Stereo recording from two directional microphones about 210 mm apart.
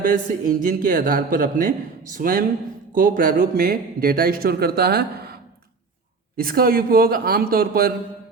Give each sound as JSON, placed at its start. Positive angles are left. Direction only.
{"t": 0.0, "sound": "a man's voice", "side_deg": -40}